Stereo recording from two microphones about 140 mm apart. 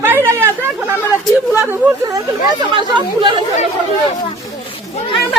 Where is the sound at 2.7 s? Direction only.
30° right (ahead or behind).